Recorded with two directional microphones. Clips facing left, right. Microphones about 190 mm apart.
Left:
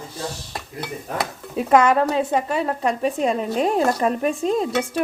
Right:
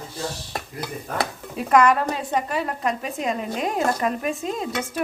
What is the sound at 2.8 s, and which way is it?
Speech, 35° left (ahead or behind).